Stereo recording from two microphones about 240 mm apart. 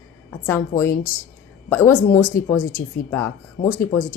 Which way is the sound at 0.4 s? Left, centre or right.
Centre.